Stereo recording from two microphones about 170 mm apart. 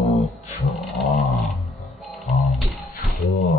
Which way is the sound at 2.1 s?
Centre (ahead or behind).